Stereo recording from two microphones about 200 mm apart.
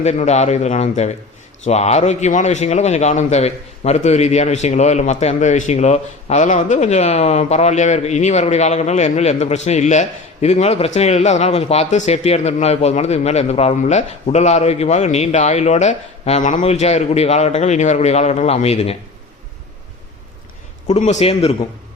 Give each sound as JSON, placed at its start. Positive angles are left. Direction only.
{"t": 0.0, "sound": "a man's voice", "side_deg": 35}
{"t": 20.8, "sound": "a man's voice", "side_deg": 35}